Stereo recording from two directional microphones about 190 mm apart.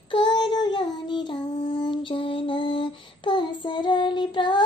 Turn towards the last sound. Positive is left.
turn(degrees=25)  # may be behind; listen again after turning